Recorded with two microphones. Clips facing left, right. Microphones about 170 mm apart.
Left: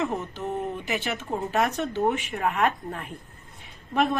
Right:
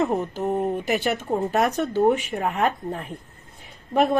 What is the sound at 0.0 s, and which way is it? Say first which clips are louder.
Speech: right 6 dB; 40° right (ahead or behind).